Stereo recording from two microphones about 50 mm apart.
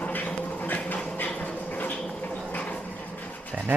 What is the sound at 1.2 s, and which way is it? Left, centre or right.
Dog, left.